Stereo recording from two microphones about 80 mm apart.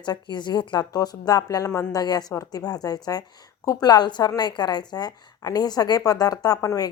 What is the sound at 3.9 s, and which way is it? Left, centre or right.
A woman's voice, left.